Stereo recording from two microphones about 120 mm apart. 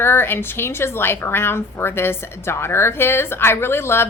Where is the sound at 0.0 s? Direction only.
20° left (ahead or behind).